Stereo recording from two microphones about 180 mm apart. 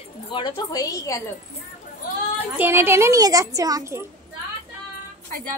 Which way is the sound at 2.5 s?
15° right (ahead or behind).